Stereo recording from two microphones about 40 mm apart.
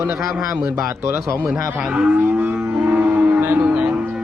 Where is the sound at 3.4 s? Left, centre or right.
Right.